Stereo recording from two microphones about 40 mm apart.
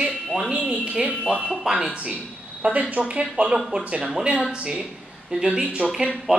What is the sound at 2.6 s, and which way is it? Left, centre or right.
A woman's voice, right.